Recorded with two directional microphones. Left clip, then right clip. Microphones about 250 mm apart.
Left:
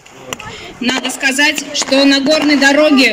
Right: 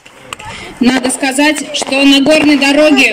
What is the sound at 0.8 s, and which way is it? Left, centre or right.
A woman's voice, right.